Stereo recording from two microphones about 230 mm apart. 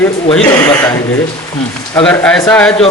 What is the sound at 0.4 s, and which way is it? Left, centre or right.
Speech, centre.